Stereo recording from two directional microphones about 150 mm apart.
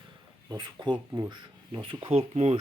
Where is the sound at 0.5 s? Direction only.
30° right (ahead or behind); by 2.6 s 45° right (ahead or behind).